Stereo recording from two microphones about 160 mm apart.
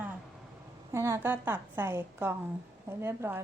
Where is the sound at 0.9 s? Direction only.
15° right (ahead or behind).